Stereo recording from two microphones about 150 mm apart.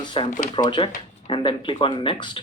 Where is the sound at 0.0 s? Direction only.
35° left (ahead or behind).